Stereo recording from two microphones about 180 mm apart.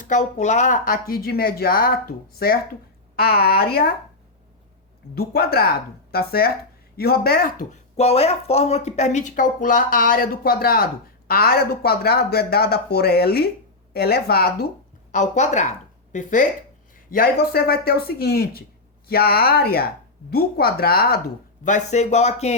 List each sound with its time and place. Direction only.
0.0 s speech: 40° left (ahead or behind); by 3.8 s 60° left (ahead or behind)
5.1 s speech: 60° left (ahead or behind)
15.1 s speech: 40° left (ahead or behind); by 21.2 s 60° left (ahead or behind)
21.6 s speech: 45° left (ahead or behind)